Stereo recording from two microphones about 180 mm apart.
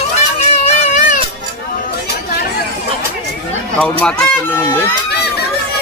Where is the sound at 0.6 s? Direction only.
40° left (ahead or behind).